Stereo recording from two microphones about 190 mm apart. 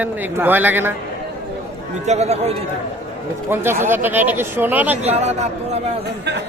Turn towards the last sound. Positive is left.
turn(degrees=-35)  # may be behind; listen again after turning